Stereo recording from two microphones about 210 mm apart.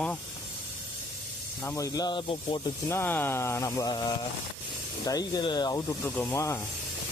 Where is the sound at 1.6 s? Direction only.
15° left (ahead or behind).